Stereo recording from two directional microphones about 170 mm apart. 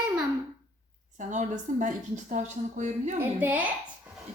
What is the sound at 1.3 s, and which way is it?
A woman's voice, 45° right (ahead or behind).